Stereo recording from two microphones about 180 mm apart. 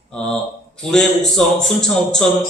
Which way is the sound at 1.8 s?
5° left (ahead or behind).